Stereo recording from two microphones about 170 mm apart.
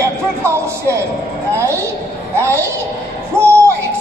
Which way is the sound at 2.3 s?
15° right (ahead or behind).